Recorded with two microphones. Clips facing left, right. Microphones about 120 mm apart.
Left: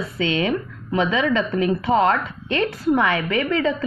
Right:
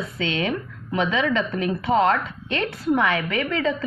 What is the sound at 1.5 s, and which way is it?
A woman's voice, 25° left (ahead or behind).